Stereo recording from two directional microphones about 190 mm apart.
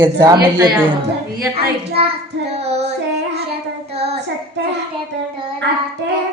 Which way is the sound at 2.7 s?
35° right (ahead or behind).